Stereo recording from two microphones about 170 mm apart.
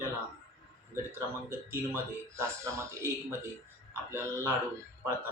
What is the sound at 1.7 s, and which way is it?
Speech, 15° right (ahead or behind).